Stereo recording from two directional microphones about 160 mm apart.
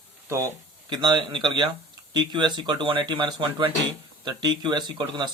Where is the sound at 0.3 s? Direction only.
20° right (ahead or behind).